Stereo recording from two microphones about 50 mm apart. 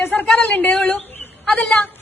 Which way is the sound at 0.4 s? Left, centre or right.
Left.